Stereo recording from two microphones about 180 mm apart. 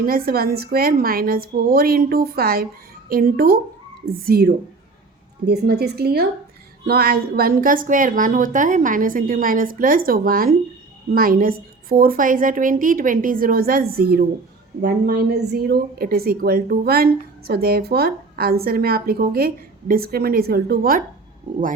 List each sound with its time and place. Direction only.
0.0 s a woman's voice: 55° right (ahead or behind)